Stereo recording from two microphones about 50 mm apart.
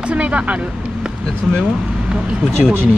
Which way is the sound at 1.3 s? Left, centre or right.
Left.